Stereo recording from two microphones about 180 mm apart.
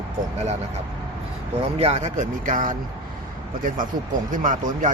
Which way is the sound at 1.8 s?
35° right (ahead or behind).